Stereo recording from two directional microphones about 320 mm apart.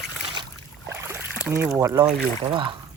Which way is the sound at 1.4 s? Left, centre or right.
Centre.